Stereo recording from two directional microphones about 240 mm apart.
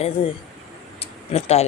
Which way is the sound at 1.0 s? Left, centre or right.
Left.